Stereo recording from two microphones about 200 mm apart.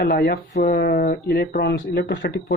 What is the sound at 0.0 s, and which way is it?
Speech, 50° left (ahead or behind).